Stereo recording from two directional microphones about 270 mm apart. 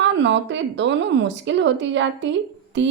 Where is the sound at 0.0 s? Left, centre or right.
Right.